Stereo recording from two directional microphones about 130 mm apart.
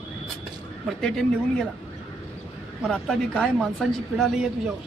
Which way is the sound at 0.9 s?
5° left (ahead or behind).